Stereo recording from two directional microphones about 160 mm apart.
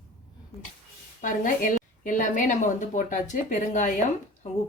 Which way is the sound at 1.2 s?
55° left (ahead or behind).